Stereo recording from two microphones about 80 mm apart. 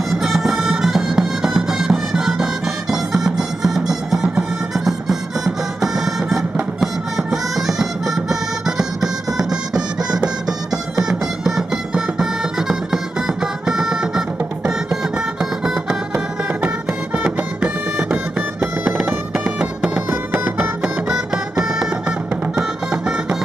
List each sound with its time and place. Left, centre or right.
0.2 s music: centre
15.6 s music: centre
19.3 s music: centre
20.1 s music: centre